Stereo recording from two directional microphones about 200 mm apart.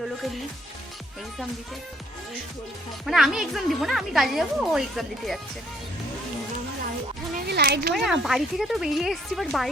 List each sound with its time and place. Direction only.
3.1 s a woman's voice: centre (ahead or behind)
7.3 s a child's voice: 50° right (ahead or behind)
7.9 s a woman's voice: centre (ahead or behind)